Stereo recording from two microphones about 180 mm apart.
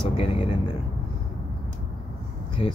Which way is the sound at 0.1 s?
30° left (ahead or behind).